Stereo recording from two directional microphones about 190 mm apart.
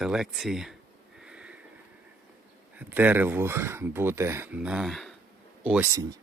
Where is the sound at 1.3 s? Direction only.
5° right (ahead or behind).